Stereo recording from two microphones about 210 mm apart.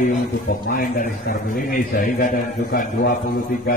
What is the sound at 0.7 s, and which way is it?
Speech, 40° left (ahead or behind).